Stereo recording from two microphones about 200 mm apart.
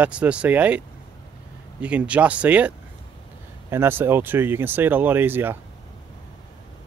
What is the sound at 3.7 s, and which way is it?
Speech, 10° right (ahead or behind).